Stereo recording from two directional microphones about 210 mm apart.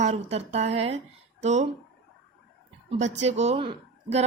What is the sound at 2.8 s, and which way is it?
Speech, 35° right (ahead or behind).